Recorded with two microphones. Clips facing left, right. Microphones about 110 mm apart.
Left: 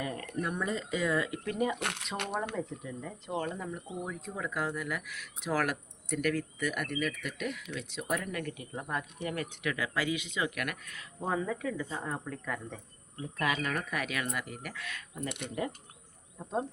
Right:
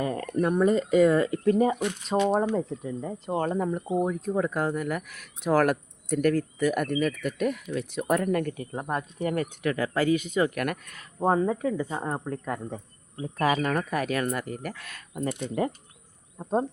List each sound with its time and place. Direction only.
0.0 s speech: 35° right (ahead or behind)
1.8 s speech: 70° left (ahead or behind)
2.6 s speech: 35° right (ahead or behind)